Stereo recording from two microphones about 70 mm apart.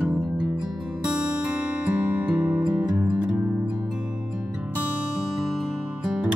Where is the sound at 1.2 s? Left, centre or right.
Centre.